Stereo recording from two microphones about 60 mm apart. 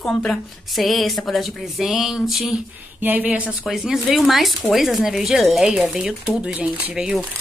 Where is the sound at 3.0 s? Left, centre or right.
Right.